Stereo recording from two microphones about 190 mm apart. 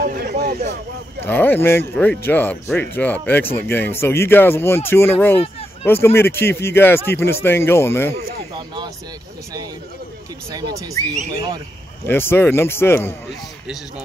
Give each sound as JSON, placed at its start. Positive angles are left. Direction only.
{"t": 0.0, "sound": "a sound", "side_deg": -45}
{"t": 1.2, "sound": "speech", "side_deg": 10}
{"t": 8.1, "sound": "speech", "side_deg": -25}
{"t": 10.5, "sound": "speech", "side_deg": -20}
{"t": 12.1, "sound": "speech", "side_deg": 10}